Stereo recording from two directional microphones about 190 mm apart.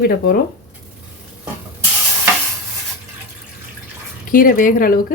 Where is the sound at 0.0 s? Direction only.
50° left (ahead or behind).